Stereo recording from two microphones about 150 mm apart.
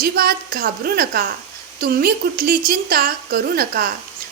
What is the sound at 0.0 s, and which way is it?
A woman's voice, 85° right.